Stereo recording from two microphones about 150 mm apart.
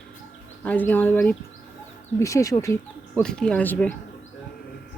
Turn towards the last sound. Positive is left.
turn(degrees=10)  # may be behind; listen again after turning